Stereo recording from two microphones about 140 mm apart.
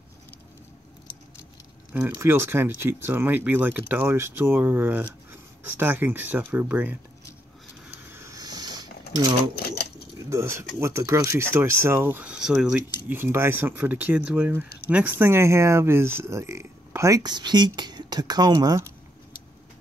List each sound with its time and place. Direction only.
2.0 s speech: 15° right (ahead or behind)
8.1 s a sound: 20° right (ahead or behind)
10.1 s speech: 20° right (ahead or behind)